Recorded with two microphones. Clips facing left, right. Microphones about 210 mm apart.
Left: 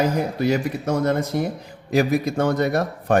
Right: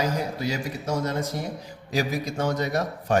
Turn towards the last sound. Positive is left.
turn(degrees=55)  # may be behind; listen again after turning